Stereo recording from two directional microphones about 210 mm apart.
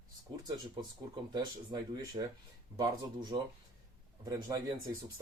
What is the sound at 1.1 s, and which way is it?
Speech, 20° right (ahead or behind).